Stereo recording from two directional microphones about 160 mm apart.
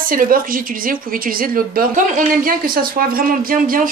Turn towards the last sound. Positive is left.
turn(degrees=-60)  # may be behind; listen again after turning